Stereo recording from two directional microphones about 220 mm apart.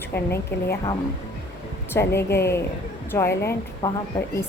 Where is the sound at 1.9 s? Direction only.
10° left (ahead or behind).